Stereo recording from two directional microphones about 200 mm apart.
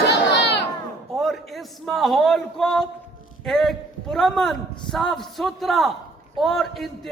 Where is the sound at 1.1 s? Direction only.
Centre (ahead or behind).